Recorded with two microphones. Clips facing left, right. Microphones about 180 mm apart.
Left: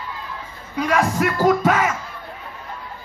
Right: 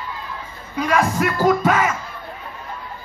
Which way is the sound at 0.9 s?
65° left (ahead or behind).